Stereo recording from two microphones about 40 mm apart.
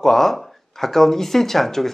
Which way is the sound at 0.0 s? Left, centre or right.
Centre.